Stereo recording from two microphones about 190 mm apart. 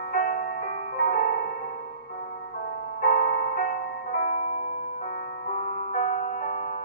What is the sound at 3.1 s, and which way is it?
Music, 45° left (ahead or behind).